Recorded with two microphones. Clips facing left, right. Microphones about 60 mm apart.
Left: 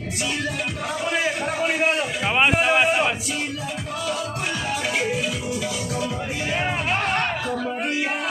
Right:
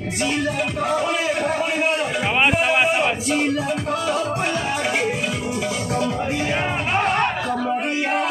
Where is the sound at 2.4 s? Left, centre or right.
Centre.